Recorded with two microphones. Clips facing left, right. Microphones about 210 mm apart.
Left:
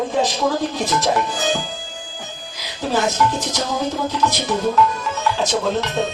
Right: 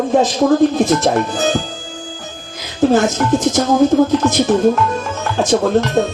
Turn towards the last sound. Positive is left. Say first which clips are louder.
# right 7 dB
turn(degrees=-50)  # may be behind; listen again after turning